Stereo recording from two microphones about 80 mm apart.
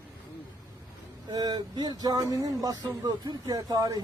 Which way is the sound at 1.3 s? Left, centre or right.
Right.